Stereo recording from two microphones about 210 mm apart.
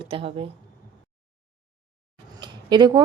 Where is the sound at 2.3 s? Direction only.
20° right (ahead or behind).